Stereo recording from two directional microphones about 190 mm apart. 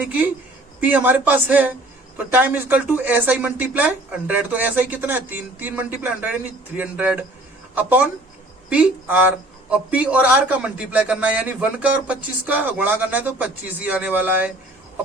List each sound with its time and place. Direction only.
0.0 s speech: 10° right (ahead or behind)